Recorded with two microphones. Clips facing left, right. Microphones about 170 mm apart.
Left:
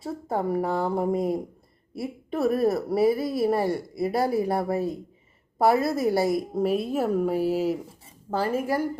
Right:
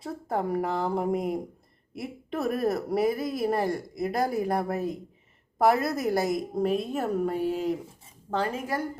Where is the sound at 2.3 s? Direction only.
25° left (ahead or behind).